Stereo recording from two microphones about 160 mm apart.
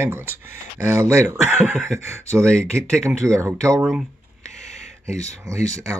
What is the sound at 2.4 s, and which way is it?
Speech, 5° left (ahead or behind).